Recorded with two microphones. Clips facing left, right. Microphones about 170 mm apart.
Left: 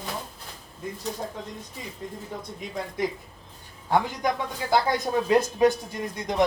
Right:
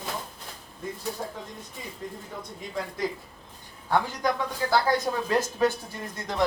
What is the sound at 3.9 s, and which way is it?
Speech, 15° left (ahead or behind).